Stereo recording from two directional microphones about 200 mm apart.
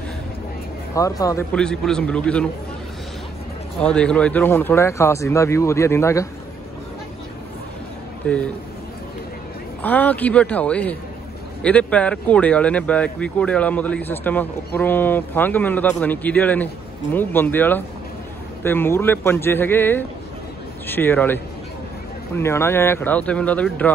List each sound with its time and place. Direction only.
0.9 s speech: 15° left (ahead or behind)
1.5 s a man's voice: 5° left (ahead or behind)
3.8 s speech: 5° left (ahead or behind)
8.2 s speech: 5° left (ahead or behind)
9.8 s speech: 10° left (ahead or behind)